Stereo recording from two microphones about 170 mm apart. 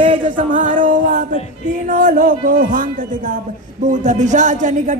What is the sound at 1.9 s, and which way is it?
Speech, 55° right (ahead or behind).